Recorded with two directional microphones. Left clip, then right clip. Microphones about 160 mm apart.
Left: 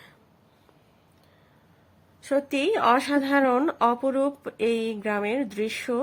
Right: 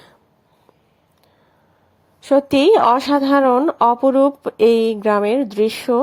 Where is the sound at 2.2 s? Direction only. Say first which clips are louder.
Right 11 dB; 40° right (ahead or behind).